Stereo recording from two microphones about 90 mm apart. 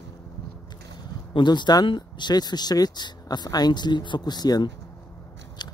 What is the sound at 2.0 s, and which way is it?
Speech, 50° left (ahead or behind).